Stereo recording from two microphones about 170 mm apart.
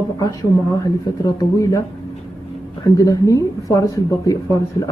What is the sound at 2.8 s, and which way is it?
Speech, 20° left (ahead or behind).